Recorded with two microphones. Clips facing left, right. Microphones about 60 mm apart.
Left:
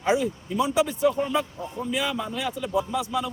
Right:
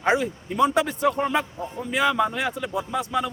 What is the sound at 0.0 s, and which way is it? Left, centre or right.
A man's voice, right.